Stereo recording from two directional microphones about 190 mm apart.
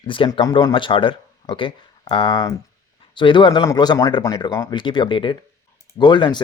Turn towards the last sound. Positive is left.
turn(degrees=25)  # may be behind; listen again after turning